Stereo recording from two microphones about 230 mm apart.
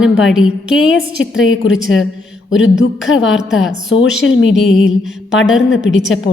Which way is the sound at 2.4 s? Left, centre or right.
Left.